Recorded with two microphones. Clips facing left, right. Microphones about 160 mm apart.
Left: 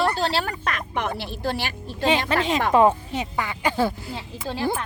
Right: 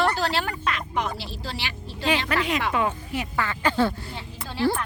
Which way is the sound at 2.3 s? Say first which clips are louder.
Left 4 dB; 25° left (ahead or behind).